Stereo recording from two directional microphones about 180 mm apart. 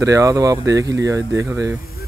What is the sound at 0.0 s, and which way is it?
Speech, 15° right (ahead or behind).